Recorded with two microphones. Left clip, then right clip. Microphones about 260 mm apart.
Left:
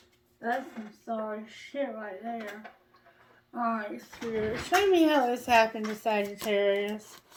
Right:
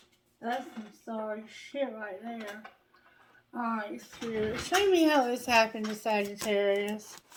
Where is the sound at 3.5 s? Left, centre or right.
Centre.